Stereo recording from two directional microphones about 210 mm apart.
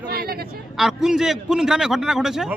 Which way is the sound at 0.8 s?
Centre (ahead or behind).